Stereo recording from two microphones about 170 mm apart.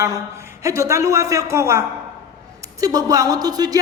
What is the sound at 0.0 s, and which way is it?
A man's voice, 15° right (ahead or behind).